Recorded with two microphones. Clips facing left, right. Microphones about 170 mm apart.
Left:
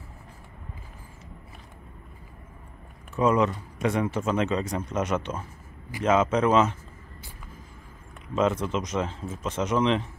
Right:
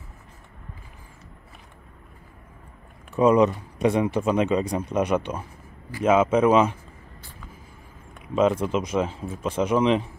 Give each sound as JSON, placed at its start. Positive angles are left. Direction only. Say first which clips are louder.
{"t": 3.2, "sound": "speech", "louder": "right 5 dB", "side_deg": -15}
{"t": 8.4, "sound": "speech", "louder": "right 4 dB", "side_deg": -10}